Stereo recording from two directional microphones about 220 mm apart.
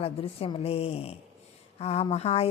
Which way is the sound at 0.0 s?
25° left (ahead or behind).